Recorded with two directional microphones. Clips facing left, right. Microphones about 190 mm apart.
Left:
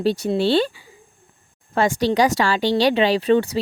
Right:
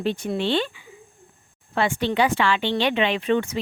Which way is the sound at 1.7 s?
40° left (ahead or behind).